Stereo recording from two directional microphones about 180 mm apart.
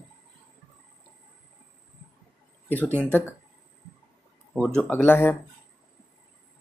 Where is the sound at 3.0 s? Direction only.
10° left (ahead or behind).